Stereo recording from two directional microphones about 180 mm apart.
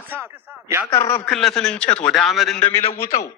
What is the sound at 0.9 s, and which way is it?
Speech, 15° left (ahead or behind).